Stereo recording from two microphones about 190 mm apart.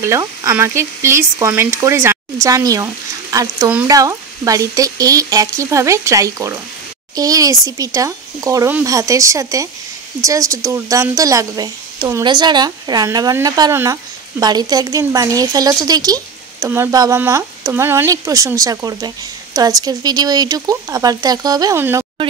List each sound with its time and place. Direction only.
0.0 s a woman's voice: 15° right (ahead or behind)